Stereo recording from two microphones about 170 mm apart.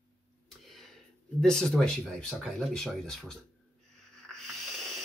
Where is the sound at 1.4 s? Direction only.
5° left (ahead or behind).